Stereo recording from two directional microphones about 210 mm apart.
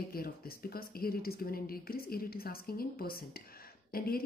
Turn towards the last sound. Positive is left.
turn(degrees=45)  # may be behind; listen again after turning